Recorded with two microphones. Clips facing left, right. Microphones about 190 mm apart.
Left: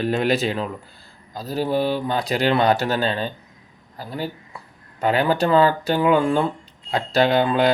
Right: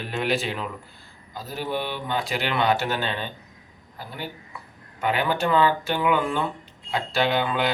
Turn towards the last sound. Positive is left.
turn(degrees=40)  # may be behind; listen again after turning